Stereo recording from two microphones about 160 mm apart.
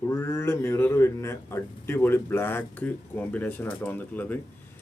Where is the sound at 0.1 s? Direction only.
15° left (ahead or behind).